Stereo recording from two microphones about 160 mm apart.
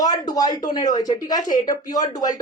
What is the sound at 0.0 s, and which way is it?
Speech, 25° left (ahead or behind).